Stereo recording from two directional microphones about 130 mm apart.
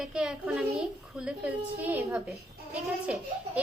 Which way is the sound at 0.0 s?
5° right (ahead or behind).